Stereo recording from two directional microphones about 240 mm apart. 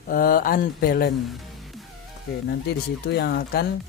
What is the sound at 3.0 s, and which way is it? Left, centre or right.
Speech, left.